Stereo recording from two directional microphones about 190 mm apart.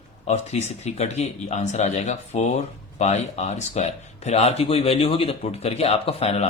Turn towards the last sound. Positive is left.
turn(degrees=30)  # may be behind; listen again after turning